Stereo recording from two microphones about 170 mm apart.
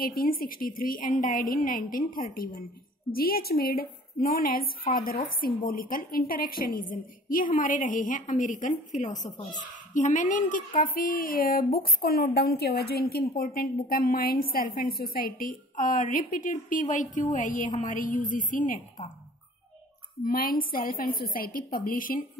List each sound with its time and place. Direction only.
0.0 s a woman's voice: 60° left (ahead or behind)
20.2 s a woman's voice: 55° left (ahead or behind)